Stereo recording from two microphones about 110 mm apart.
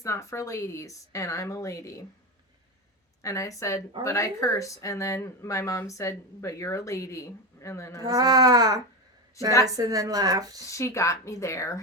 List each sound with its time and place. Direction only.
0.0 s speech: 25° left (ahead or behind)
3.2 s speech: 30° left (ahead or behind)
8.0 s speech: 35° right (ahead or behind)
9.4 s speech: 30° left (ahead or behind)
9.7 s speech: 35° right (ahead or behind)
10.7 s speech: 25° left (ahead or behind)